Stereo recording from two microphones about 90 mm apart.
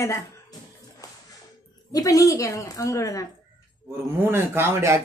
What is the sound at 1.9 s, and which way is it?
A woman's voice, 40° left (ahead or behind).